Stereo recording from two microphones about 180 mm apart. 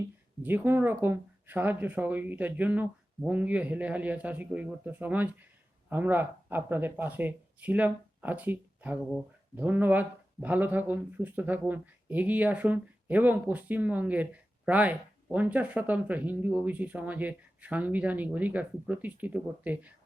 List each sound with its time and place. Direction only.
0.4 s speech: 10° right (ahead or behind)